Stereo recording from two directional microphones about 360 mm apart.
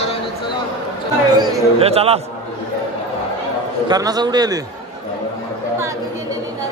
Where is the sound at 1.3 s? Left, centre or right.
Centre.